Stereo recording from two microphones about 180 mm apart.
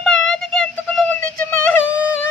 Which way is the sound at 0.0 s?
Centre (ahead or behind).